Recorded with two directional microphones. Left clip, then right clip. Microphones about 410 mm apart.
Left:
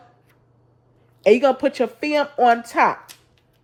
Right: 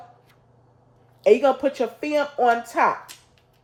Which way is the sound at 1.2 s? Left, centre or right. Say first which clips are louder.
Left 2 dB; centre.